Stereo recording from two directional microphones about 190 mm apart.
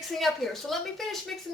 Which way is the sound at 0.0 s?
Centre (ahead or behind).